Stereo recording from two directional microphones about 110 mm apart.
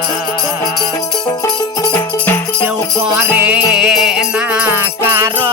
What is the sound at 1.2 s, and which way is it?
Music, 30° left (ahead or behind).